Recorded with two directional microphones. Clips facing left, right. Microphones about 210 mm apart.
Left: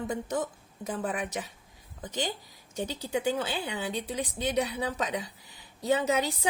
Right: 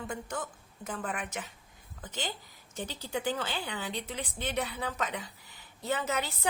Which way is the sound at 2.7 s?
10° left (ahead or behind).